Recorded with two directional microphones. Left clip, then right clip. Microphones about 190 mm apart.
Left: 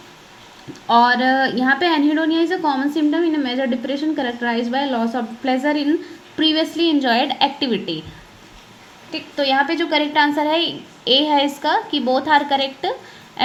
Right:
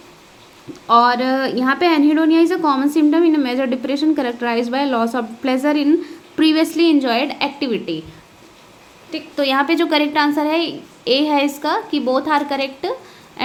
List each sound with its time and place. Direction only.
0.7 s a woman's voice: 10° right (ahead or behind)
9.3 s a woman's voice: 25° right (ahead or behind)